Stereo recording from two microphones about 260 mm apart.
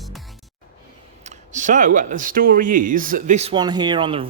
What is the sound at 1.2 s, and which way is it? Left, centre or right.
A man's voice, right.